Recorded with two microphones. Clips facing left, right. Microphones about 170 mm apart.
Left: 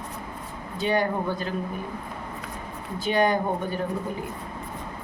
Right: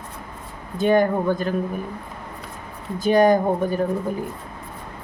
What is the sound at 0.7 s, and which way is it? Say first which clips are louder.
Speech: right 7 dB; 50° right (ahead or behind).